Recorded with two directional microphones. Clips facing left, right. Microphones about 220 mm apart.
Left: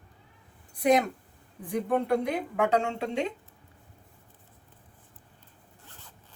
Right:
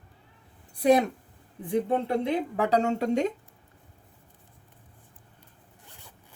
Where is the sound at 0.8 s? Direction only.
30° right (ahead or behind).